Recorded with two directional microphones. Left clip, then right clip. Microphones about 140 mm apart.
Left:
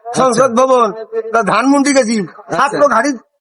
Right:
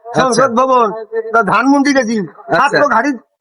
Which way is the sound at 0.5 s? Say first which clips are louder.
Even; 45° left (ahead or behind).